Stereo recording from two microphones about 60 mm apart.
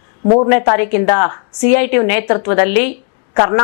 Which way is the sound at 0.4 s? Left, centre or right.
Left.